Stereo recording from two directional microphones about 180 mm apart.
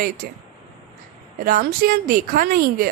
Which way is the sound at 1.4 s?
55° right (ahead or behind).